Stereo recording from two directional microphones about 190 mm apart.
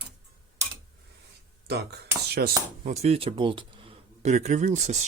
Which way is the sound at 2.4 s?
55° right (ahead or behind).